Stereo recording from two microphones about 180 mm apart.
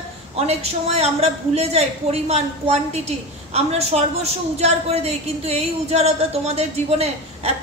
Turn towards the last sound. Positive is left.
turn(degrees=-35)  # may be behind; listen again after turning